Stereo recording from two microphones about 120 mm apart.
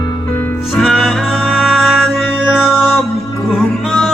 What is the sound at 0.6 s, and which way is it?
Music, centre (ahead or behind).